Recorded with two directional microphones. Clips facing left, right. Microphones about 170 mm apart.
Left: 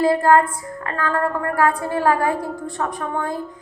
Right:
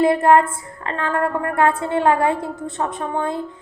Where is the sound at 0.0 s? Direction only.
25° right (ahead or behind).